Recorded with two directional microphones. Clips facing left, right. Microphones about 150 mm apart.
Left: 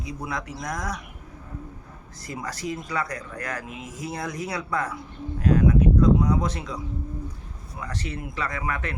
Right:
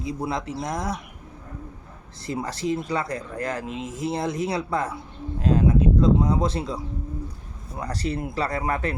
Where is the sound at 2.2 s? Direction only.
25° right (ahead or behind).